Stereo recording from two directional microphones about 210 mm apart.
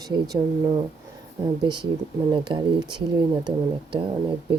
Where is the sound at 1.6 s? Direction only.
20° right (ahead or behind).